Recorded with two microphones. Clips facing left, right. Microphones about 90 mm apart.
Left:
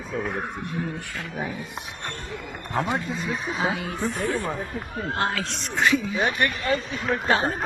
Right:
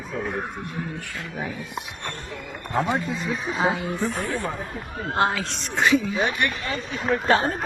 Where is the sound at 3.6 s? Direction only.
25° right (ahead or behind).